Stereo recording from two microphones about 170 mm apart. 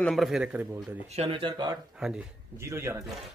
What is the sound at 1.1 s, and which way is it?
Speech, 35° right (ahead or behind).